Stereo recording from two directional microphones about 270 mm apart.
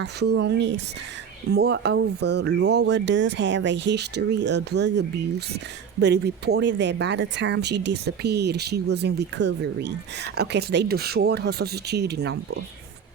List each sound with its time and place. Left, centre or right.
0.0 s speech: right